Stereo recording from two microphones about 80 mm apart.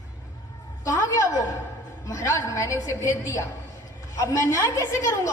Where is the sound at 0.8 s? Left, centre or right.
Left.